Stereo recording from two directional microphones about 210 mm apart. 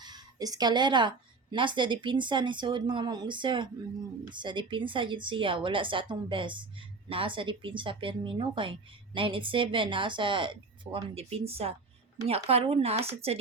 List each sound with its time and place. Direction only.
0.0 s a woman's voice: 20° right (ahead or behind)